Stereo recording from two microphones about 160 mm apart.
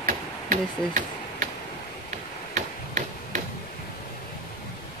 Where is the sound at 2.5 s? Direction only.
50° right (ahead or behind).